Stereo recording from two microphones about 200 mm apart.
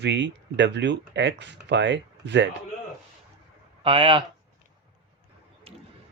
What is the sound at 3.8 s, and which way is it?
Speech, 25° right (ahead or behind).